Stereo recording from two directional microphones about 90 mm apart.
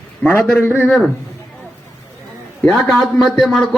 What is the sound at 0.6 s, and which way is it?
Speech, 20° left (ahead or behind).